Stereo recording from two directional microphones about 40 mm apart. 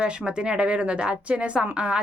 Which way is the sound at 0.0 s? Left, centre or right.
Right.